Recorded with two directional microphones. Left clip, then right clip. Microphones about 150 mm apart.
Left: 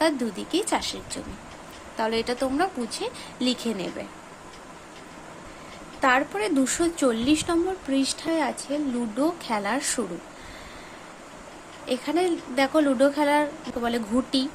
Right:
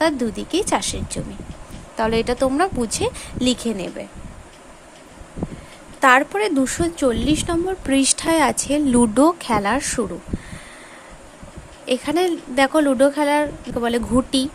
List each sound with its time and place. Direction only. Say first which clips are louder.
0.0 s speech: right 4 dB; 30° right (ahead or behind)
6.0 s a woman's voice: right 7 dB; 35° right (ahead or behind)
7.9 s speech: right 7 dB; 40° right (ahead or behind)
11.9 s speech: right 5 dB; 30° right (ahead or behind)